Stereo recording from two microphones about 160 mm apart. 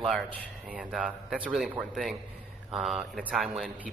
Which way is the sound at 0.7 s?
5° right (ahead or behind).